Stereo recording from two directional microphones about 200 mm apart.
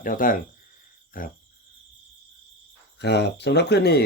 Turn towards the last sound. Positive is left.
turn(degrees=55)  # may be behind; listen again after turning